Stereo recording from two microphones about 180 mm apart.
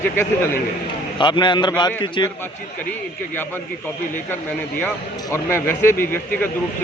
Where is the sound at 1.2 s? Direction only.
25° left (ahead or behind).